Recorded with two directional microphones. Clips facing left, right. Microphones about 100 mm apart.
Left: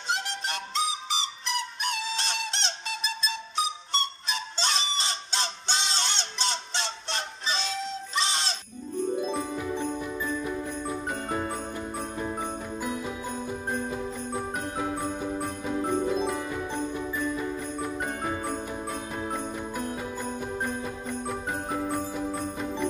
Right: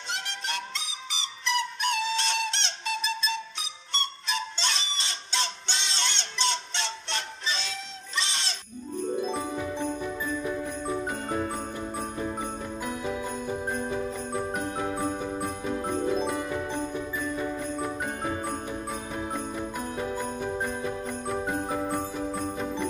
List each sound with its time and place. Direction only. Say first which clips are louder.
0.1 s music: left 3 dB; 40° left (ahead or behind)
4.6 s fowl: left 3 dB; 40° left (ahead or behind)
8.2 s goat: left 3 dB; 40° left (ahead or behind)